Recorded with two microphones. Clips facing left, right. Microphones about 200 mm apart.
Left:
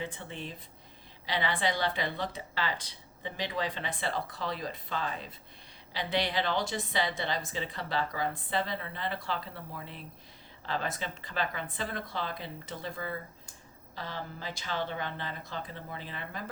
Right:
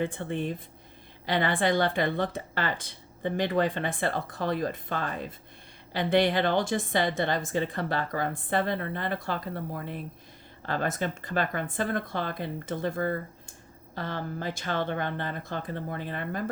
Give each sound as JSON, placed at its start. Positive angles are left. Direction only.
{"t": 0.0, "sound": "speech", "side_deg": -55}